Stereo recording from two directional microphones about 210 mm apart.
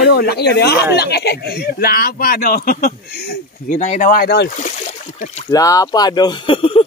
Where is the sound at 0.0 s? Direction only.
50° left (ahead or behind).